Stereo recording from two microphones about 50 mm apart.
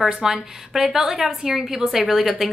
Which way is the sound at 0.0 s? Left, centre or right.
Centre.